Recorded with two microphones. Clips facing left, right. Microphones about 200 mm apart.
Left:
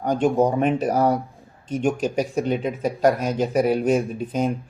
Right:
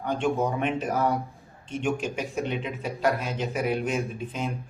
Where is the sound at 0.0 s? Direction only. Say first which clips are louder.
Left 7 dB; 40° left (ahead or behind).